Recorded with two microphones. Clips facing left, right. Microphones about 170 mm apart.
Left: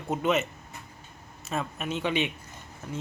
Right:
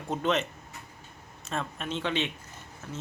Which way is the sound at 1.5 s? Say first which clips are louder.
Left 2 dB; 10° left (ahead or behind).